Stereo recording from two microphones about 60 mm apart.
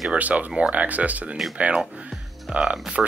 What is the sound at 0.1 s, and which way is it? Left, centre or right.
Speech, right.